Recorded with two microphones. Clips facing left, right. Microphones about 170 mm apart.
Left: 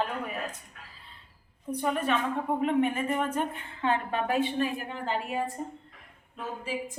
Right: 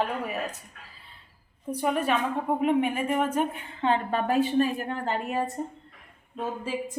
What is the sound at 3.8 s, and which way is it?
Speech, 30° right (ahead or behind).